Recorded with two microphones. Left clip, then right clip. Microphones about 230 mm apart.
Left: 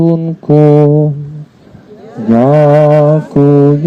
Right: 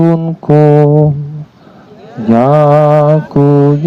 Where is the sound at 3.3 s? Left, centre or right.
Right.